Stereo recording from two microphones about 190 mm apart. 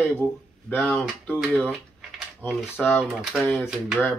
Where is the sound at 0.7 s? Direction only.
5° left (ahead or behind).